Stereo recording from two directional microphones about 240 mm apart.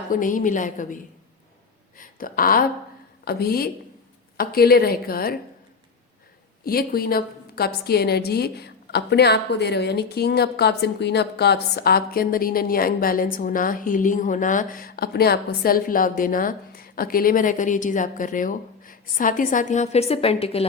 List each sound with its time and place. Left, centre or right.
0.1 s a woman's voice: left
6.7 s a woman's voice: left